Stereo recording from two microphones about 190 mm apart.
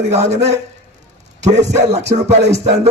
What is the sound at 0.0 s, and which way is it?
Speech, 35° right (ahead or behind).